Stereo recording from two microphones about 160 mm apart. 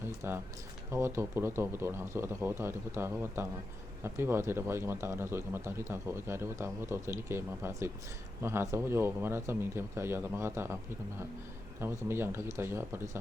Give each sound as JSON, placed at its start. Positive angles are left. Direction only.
{"t": 0.0, "sound": "a man's voice", "side_deg": -15}
{"t": 11.8, "sound": "a man's voice", "side_deg": -15}